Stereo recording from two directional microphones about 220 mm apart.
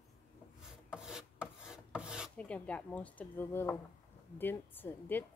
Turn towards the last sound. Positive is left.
turn(degrees=10)  # may be behind; listen again after turning